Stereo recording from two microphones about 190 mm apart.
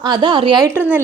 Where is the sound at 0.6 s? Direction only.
10° right (ahead or behind).